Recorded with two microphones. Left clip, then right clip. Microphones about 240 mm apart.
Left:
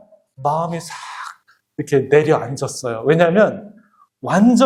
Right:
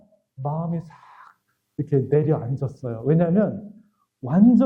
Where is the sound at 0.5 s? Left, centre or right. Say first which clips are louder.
Left 10 dB; centre.